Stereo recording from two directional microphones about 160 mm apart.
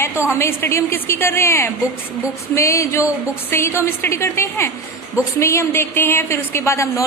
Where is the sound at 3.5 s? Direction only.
15° left (ahead or behind).